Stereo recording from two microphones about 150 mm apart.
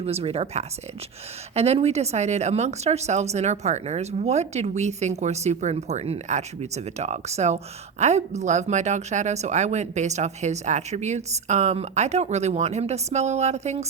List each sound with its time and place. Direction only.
0.0 s speech: 45° right (ahead or behind)